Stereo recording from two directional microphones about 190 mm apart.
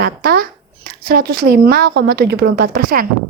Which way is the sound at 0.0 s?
50° right (ahead or behind).